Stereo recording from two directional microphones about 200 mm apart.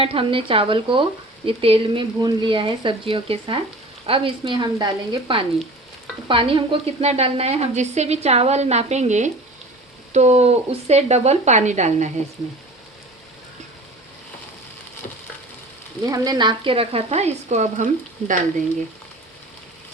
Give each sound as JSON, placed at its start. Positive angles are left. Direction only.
{"t": 0.0, "sound": "a woman's voice", "side_deg": -30}
{"t": 16.0, "sound": "speech", "side_deg": -20}